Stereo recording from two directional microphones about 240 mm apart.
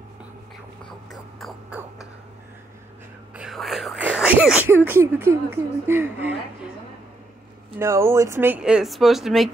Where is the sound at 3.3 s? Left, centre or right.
Centre.